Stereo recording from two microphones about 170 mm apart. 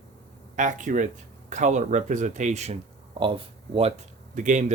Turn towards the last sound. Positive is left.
turn(degrees=-45)  # may be behind; listen again after turning